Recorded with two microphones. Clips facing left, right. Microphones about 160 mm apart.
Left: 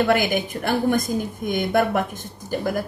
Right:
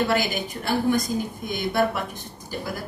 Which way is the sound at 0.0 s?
55° left (ahead or behind).